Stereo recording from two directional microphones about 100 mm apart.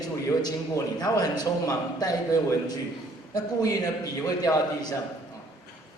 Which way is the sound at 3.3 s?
40° left (ahead or behind).